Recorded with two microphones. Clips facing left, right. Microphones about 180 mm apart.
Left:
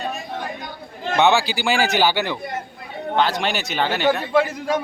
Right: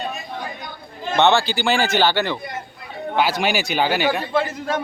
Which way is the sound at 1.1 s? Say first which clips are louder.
Right 1 dB; 5° left (ahead or behind).